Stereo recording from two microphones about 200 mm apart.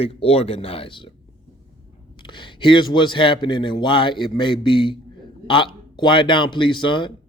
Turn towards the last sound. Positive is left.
turn(degrees=25)  # may be behind; listen again after turning